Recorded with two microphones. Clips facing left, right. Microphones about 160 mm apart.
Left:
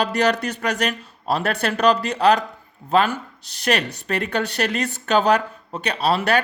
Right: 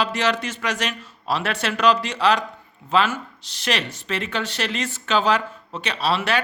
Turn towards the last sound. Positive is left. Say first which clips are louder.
# left 3 dB
turn(degrees=45)  # may be behind; listen again after turning